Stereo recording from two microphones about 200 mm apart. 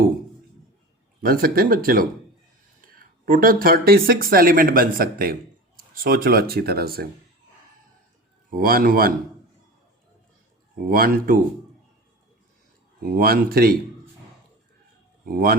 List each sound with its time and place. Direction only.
1.2 s speech: 45° right (ahead or behind)
8.4 s speech: 45° right (ahead or behind)
10.8 s speech: 45° right (ahead or behind)
13.0 s speech: 45° right (ahead or behind)
15.2 s speech: 50° right (ahead or behind)